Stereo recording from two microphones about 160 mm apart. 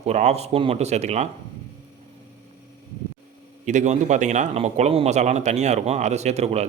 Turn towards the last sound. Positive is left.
turn(degrees=-45)  # may be behind; listen again after turning